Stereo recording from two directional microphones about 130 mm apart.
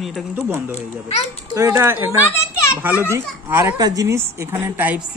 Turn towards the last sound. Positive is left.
turn(degrees=-15)  # may be behind; listen again after turning